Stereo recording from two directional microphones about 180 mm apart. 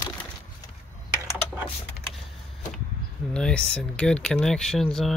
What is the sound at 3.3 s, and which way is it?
Speech, 5° left (ahead or behind).